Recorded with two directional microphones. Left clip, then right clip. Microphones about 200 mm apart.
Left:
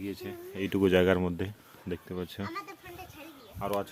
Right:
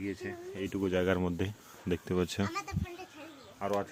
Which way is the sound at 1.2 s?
Centre (ahead or behind).